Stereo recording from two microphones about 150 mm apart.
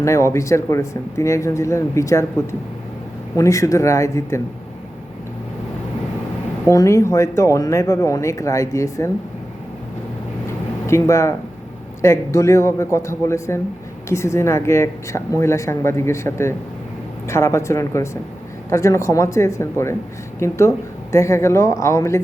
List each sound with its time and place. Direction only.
0.0 s speech: 20° left (ahead or behind)
6.7 s speech: 20° left (ahead or behind)
10.8 s speech: 20° left (ahead or behind)